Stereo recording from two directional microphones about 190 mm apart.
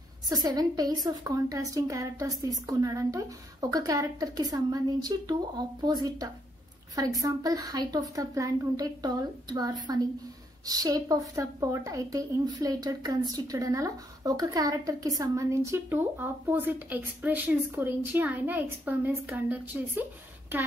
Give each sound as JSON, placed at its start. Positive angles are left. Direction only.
{"t": 0.3, "sound": "a woman's voice", "side_deg": -20}